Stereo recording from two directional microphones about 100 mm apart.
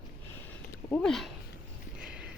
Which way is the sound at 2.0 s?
10° right (ahead or behind).